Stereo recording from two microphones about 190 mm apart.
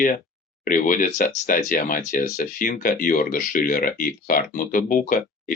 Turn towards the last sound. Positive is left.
turn(degrees=45)  # may be behind; listen again after turning